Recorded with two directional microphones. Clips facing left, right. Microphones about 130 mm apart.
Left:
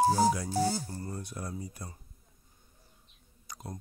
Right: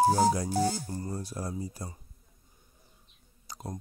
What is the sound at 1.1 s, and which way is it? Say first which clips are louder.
Speech: right 4 dB; 35° right (ahead or behind).